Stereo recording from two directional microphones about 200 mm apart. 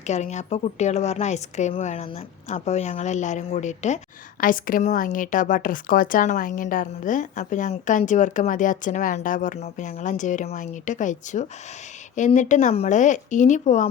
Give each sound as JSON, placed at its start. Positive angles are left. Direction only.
{"t": 0.1, "sound": "a woman's voice", "side_deg": 35}